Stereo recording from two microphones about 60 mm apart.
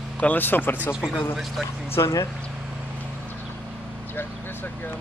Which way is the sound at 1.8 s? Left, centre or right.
Left.